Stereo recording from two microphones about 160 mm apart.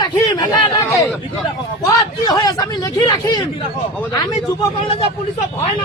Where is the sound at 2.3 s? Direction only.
25° left (ahead or behind).